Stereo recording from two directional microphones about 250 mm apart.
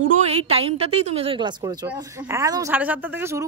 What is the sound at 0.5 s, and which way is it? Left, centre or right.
A woman's voice, right.